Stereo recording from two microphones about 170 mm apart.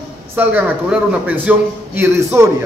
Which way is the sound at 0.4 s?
10° right (ahead or behind).